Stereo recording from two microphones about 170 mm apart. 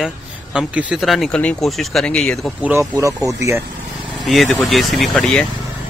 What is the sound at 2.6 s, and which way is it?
Speech, 15° right (ahead or behind).